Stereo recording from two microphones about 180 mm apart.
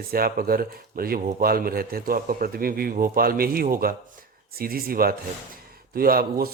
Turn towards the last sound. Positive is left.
turn(degrees=-55)  # may be behind; listen again after turning